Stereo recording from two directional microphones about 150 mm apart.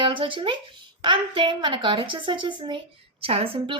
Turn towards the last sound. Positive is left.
turn(degrees=-40)  # may be behind; listen again after turning